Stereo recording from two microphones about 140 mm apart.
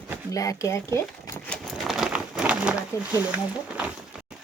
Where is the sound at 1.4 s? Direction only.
5° left (ahead or behind).